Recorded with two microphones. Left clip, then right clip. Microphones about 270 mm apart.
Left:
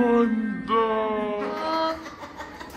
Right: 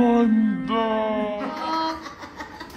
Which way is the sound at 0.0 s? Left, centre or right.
Right.